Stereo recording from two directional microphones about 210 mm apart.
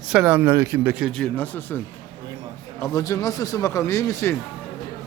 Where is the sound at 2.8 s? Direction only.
15° left (ahead or behind).